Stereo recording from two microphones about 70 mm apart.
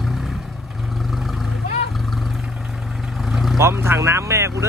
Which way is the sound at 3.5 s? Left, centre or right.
Right.